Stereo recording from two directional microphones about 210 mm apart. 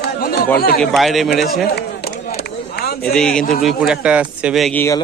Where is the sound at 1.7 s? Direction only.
45° left (ahead or behind).